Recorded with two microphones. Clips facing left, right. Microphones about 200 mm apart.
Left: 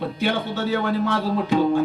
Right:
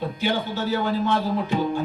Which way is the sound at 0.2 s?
65° left (ahead or behind).